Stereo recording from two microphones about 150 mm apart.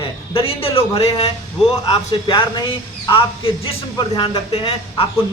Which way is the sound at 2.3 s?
35° left (ahead or behind).